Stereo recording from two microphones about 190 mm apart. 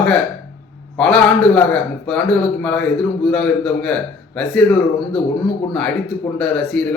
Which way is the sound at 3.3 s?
5° left (ahead or behind).